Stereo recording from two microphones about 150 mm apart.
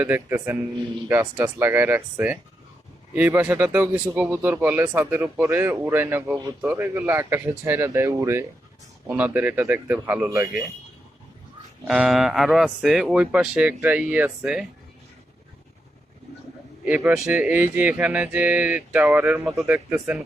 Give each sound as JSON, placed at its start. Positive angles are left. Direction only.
{"t": 0.0, "sound": "speech", "side_deg": -15}
{"t": 11.9, "sound": "speech", "side_deg": -5}
{"t": 16.8, "sound": "speech", "side_deg": -10}